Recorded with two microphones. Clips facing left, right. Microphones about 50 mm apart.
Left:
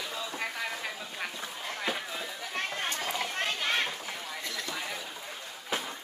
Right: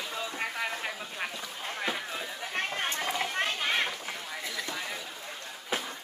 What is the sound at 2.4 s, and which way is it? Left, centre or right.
Chatter, right.